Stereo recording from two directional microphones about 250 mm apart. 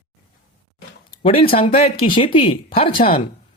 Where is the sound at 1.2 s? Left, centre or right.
Left.